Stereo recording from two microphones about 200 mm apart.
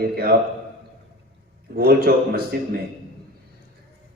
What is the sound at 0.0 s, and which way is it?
Speech, 50° right (ahead or behind).